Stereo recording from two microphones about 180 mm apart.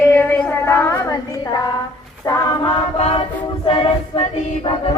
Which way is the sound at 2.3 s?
20° left (ahead or behind).